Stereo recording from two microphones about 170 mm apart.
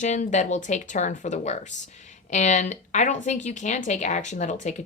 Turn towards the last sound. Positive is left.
turn(degrees=45)  # may be behind; listen again after turning